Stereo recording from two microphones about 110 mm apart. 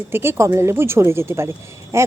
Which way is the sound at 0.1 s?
20° right (ahead or behind).